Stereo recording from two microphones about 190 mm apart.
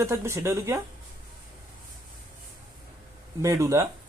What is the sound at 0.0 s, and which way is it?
Speech, 15° right (ahead or behind).